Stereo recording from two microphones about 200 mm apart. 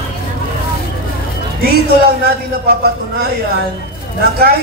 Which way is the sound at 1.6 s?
50° right (ahead or behind).